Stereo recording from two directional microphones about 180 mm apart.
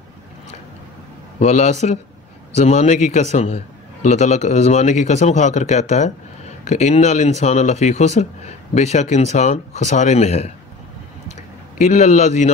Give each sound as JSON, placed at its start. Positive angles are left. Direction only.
{"t": 1.4, "sound": "a man's voice", "side_deg": 40}
{"t": 11.8, "sound": "a man's voice", "side_deg": 40}